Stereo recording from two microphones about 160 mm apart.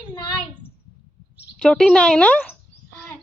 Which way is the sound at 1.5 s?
5° left (ahead or behind).